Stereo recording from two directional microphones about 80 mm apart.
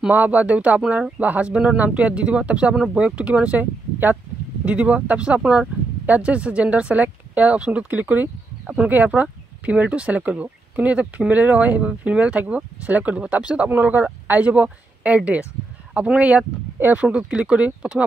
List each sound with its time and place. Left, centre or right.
0.1 s speech: right